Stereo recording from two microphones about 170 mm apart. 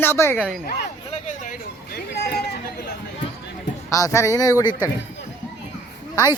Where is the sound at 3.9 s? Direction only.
20° left (ahead or behind).